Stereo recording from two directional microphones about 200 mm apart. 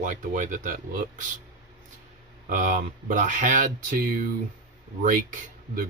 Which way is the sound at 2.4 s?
40° right (ahead or behind).